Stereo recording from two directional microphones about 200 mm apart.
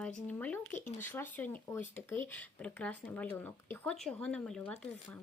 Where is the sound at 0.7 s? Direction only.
40° left (ahead or behind).